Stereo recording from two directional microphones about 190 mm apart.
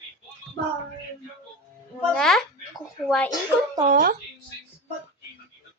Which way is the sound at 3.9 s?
50° right (ahead or behind).